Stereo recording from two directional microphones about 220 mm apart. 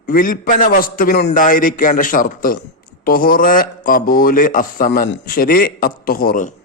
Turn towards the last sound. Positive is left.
turn(degrees=40)  # may be behind; listen again after turning